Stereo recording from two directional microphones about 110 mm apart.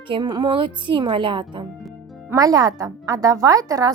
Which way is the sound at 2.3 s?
35° right (ahead or behind).